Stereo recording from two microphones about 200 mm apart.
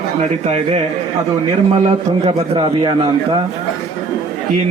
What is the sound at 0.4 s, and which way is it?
Speech, 30° right (ahead or behind).